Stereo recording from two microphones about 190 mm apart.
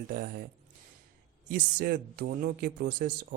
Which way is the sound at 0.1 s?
55° right (ahead or behind).